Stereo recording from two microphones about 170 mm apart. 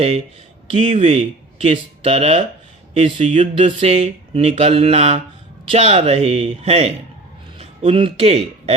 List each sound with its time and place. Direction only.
0.7 s speech: 40° right (ahead or behind)